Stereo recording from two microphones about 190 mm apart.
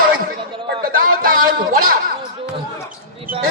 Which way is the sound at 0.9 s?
50° right (ahead or behind).